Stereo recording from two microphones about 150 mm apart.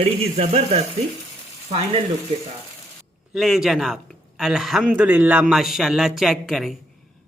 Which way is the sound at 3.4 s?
Centre (ahead or behind).